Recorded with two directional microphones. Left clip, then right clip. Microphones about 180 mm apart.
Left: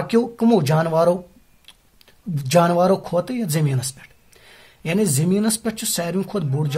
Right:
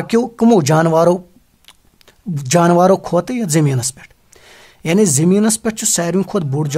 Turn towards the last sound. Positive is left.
turn(degrees=-45)  # may be behind; listen again after turning